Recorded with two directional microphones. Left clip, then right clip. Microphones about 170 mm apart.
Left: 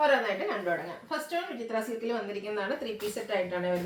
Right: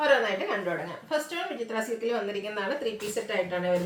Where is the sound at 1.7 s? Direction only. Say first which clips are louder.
Right 2 dB; 15° right (ahead or behind).